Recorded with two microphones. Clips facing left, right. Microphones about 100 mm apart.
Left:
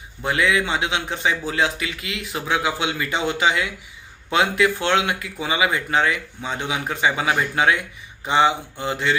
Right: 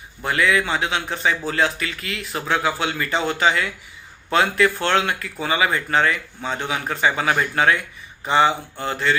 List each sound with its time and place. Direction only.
0.2 s speech: 20° left (ahead or behind)